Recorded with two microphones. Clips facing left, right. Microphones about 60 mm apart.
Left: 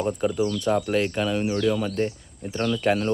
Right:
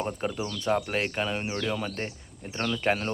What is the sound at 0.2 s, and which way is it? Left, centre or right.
Speech, right.